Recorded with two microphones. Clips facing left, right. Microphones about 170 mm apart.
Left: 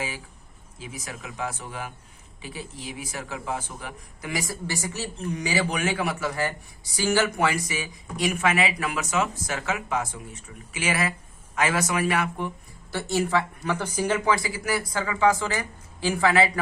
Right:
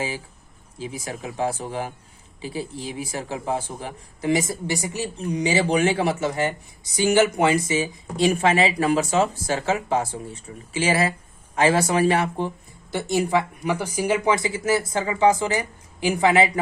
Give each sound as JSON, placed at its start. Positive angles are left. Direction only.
{"t": 0.8, "sound": "speech", "side_deg": -30}
{"t": 12.9, "sound": "speech", "side_deg": -15}